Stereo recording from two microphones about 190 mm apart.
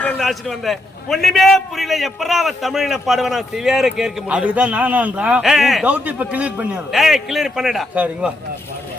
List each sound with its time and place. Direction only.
0.0 s a man's voice: centre (ahead or behind)